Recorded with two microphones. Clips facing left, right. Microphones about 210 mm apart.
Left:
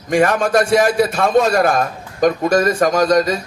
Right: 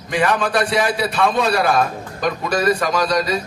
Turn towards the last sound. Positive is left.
turn(degrees=45)  # may be behind; listen again after turning